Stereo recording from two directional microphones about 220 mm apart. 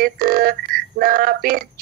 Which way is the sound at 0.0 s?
40° right (ahead or behind).